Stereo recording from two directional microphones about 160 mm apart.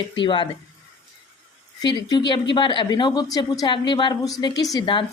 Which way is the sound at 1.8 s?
25° left (ahead or behind).